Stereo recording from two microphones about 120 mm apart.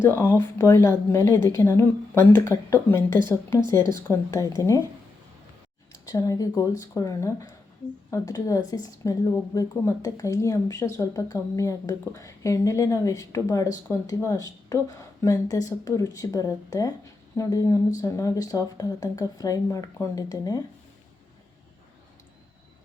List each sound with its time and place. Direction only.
0.0 s speech: 20° left (ahead or behind)
6.1 s speech: 30° left (ahead or behind)